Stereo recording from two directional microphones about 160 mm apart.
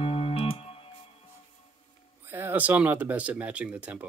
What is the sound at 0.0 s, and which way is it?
Music, 35° left (ahead or behind).